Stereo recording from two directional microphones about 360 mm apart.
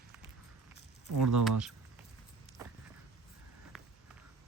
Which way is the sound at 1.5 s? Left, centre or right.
Centre.